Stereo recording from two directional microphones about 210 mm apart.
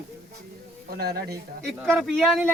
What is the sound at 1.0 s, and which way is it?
Speech, 50° right (ahead or behind).